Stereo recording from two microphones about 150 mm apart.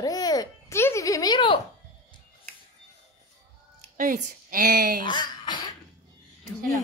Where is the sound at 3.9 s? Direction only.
65° right (ahead or behind).